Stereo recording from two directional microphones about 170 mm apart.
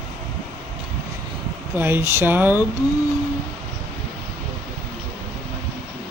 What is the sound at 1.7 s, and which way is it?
Speech, 10° right (ahead or behind).